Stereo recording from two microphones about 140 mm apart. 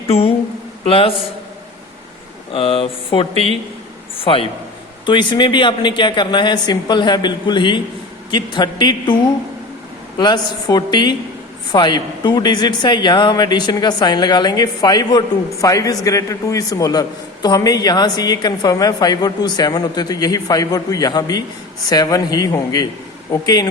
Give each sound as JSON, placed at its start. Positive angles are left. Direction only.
{"t": 0.9, "sound": "a man's voice", "side_deg": 40}
{"t": 2.5, "sound": "a man's voice", "side_deg": 40}
{"t": 10.2, "sound": "a man's voice", "side_deg": 30}